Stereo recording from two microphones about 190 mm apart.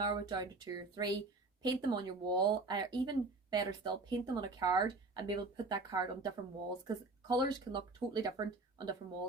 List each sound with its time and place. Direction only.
0.0 s speech: 20° right (ahead or behind)